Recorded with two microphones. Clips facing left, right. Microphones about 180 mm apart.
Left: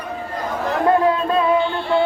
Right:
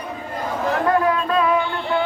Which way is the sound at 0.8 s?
25° left (ahead or behind).